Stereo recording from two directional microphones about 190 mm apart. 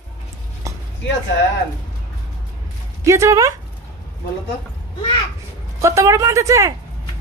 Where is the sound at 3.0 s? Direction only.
15° right (ahead or behind).